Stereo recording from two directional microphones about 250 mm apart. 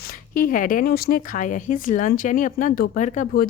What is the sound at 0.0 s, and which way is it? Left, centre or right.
Speech, left.